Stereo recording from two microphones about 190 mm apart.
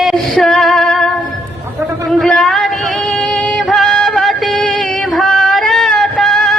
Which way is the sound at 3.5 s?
Centre (ahead or behind).